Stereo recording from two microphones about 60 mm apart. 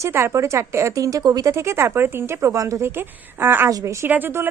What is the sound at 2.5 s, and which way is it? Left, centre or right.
Speech, right.